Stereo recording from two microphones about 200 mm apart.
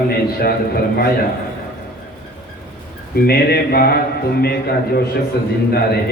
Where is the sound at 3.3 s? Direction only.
50° left (ahead or behind).